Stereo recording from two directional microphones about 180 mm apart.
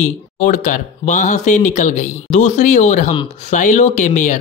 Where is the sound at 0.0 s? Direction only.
40° left (ahead or behind).